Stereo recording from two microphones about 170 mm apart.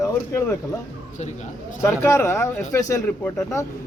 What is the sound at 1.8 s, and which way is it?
A man's voice, 15° left (ahead or behind).